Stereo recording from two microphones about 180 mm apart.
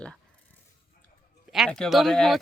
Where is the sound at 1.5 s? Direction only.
Centre (ahead or behind).